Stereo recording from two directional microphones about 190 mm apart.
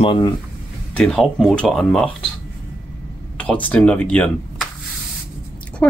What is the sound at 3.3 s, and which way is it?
Speech, 5° left (ahead or behind).